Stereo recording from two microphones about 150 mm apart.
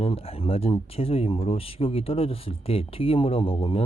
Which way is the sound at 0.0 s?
40° left (ahead or behind).